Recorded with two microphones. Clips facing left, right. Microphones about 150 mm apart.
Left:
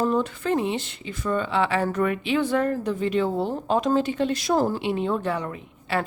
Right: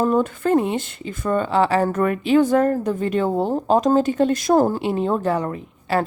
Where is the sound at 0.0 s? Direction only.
50° right (ahead or behind).